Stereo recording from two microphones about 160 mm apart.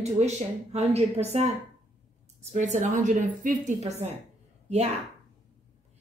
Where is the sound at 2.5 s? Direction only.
50° right (ahead or behind).